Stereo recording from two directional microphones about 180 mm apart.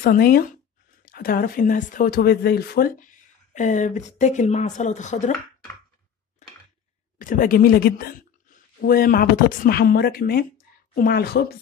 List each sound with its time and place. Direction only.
0.0 s speech: 55° left (ahead or behind)
2.1 s speech: 60° left (ahead or behind); by 5.3 s 40° left (ahead or behind)
7.2 s a woman's voice: 50° left (ahead or behind)